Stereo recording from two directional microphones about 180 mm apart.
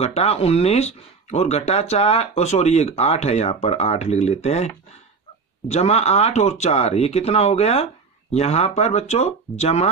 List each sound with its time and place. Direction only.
0.0 s speech: 35° left (ahead or behind)